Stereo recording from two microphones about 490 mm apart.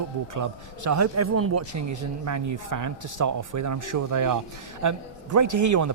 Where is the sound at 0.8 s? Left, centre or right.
Right.